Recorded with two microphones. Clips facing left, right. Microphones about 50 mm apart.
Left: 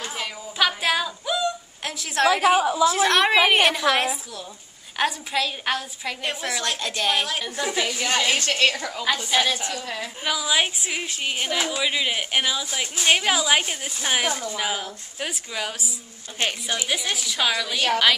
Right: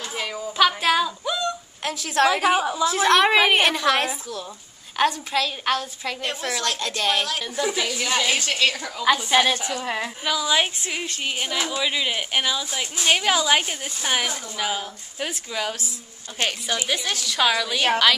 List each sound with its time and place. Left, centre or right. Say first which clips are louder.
0.1 s a woman's voice: right 3 dB; centre
8.3 s a woman's voice: left 1 dB; left
9.3 s a woman's voice: right 3 dB; right
10.2 s a woman's voice: even; centre